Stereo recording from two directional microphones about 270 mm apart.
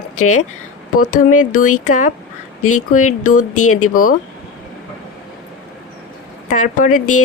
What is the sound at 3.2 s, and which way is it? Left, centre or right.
Speech, left.